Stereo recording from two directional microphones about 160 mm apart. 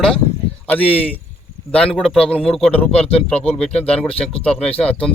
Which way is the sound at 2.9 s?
40° left (ahead or behind).